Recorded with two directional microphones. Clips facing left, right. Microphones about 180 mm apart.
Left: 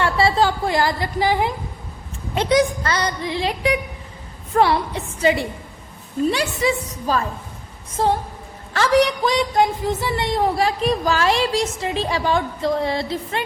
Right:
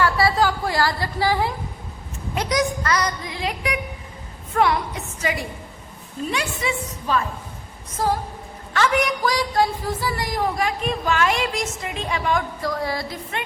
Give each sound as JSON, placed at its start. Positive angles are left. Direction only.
{"t": 0.0, "sound": "a woman's voice", "side_deg": 25}